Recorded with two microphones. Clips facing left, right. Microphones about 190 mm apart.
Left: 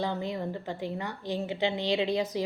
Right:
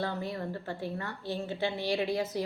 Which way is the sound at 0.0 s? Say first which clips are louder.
Left 3 dB; 20° left (ahead or behind).